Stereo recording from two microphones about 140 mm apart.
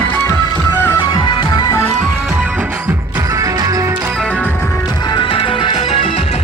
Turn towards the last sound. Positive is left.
turn(degrees=40)  # may be behind; listen again after turning